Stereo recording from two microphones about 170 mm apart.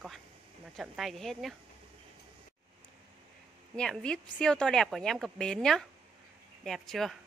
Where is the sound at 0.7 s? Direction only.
Centre (ahead or behind).